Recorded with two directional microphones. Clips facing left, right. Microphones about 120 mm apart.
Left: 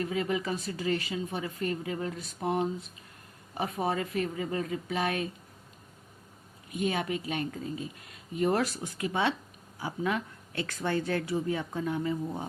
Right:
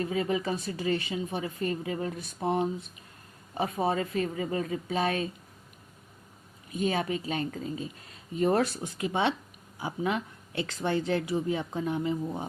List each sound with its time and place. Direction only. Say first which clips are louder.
0.0 s speech: right 2 dB; 30° right (ahead or behind)
3.8 s speech: right 2 dB; 30° right (ahead or behind)
6.7 s speech: right 2 dB; 30° right (ahead or behind)